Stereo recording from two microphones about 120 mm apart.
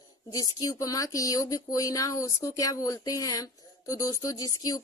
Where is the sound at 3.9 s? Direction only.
30° left (ahead or behind).